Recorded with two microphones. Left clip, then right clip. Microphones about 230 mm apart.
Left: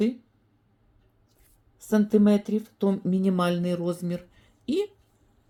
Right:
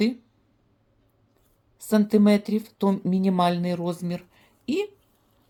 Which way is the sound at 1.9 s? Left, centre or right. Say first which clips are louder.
Right 2 dB; right.